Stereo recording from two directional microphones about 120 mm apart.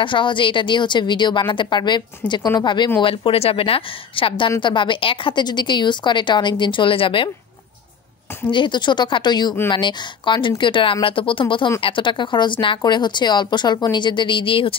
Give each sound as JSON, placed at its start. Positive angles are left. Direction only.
{"t": 0.0, "sound": "a woman's voice", "side_deg": 45}
{"t": 3.0, "sound": "a woman's voice", "side_deg": 50}
{"t": 8.5, "sound": "a woman's voice", "side_deg": 40}